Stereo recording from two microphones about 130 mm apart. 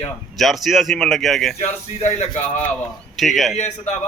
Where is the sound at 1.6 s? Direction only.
60° left (ahead or behind).